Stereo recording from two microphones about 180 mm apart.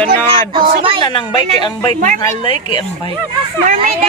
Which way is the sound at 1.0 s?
25° left (ahead or behind).